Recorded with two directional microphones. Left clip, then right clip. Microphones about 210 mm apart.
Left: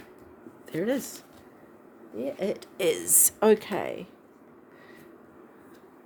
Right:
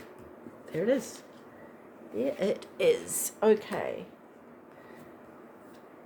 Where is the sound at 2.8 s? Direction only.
45° left (ahead or behind).